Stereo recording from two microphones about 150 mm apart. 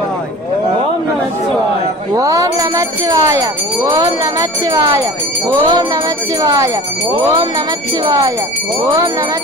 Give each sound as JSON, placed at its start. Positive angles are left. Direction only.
{"t": 2.1, "sound": "speech", "side_deg": -20}
{"t": 8.0, "sound": "speech", "side_deg": -20}